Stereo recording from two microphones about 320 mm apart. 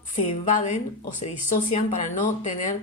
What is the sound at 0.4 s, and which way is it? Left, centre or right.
A woman's voice, left.